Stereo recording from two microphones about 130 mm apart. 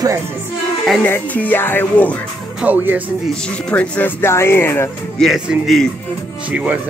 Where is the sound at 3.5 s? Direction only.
10° left (ahead or behind).